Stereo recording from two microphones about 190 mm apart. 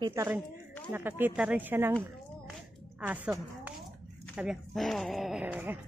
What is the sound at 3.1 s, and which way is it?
A woman's voice, 10° right (ahead or behind).